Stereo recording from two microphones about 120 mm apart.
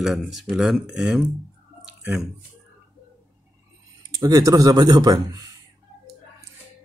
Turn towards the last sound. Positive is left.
turn(degrees=-35)  # may be behind; listen again after turning